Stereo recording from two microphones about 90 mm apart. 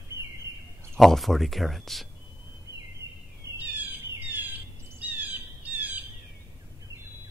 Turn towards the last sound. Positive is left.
turn(degrees=-20)  # may be behind; listen again after turning